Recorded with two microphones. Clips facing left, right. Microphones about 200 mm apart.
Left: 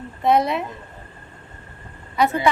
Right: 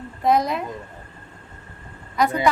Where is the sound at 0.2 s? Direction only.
5° left (ahead or behind).